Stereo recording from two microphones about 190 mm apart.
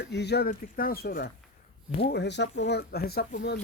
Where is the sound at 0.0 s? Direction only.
60° left (ahead or behind).